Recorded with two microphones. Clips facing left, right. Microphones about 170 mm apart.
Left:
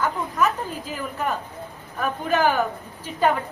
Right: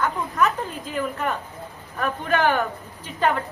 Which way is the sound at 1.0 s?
5° left (ahead or behind).